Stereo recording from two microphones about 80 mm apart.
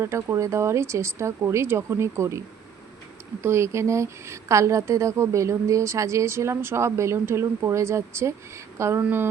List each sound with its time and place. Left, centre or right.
0.0 s a woman's voice: right
3.4 s a woman's voice: right